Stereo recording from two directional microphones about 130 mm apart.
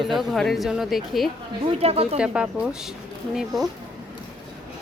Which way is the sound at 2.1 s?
5° right (ahead or behind).